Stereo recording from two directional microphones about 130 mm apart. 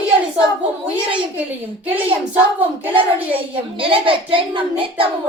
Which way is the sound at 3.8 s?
40° right (ahead or behind).